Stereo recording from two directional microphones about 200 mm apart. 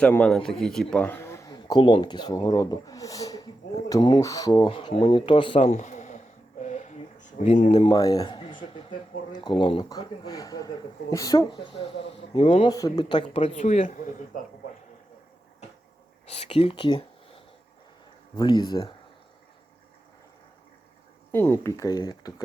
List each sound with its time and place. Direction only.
0.0 s a man's voice: 5° left (ahead or behind); by 6.1 s 35° left (ahead or behind)
6.6 s a sound: 35° left (ahead or behind)
7.7 s a man's voice: 25° left (ahead or behind)
11.6 s speech: 25° left (ahead or behind)
16.2 s speech: 30° left (ahead or behind)
18.3 s speech: 20° left (ahead or behind)
21.3 s a man's voice: 10° left (ahead or behind)